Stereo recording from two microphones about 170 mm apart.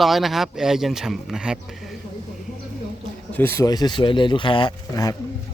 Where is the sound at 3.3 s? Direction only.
10° left (ahead or behind).